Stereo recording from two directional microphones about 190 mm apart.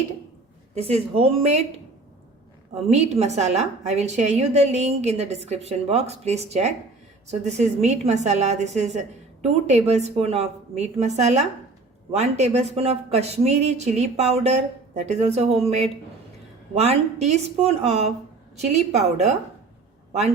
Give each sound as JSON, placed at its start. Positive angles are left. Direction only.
{"t": 0.8, "sound": "a woman's voice", "side_deg": -30}
{"t": 2.9, "sound": "a woman's voice", "side_deg": -35}